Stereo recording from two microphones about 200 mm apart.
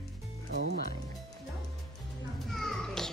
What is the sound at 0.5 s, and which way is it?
Speech, 60° right (ahead or behind).